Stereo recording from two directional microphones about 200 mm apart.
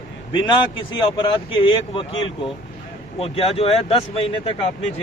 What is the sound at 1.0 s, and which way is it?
Speech, 25° left (ahead or behind).